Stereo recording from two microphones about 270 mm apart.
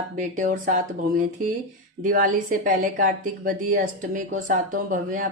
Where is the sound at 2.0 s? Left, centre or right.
Right.